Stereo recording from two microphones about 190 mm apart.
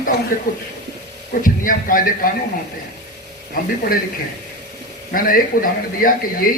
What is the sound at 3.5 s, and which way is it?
Speech, 50° left (ahead or behind).